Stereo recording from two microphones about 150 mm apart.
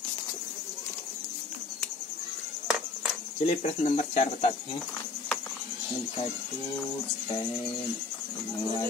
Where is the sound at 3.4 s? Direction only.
50° left (ahead or behind).